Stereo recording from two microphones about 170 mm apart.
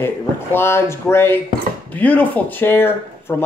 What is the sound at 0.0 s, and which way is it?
Speech, 15° left (ahead or behind).